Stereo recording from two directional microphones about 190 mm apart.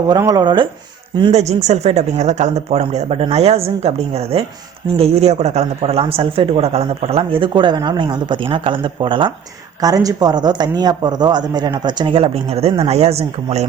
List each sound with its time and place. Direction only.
0.1 s speech: 20° right (ahead or behind)
1.3 s speech: 35° right (ahead or behind)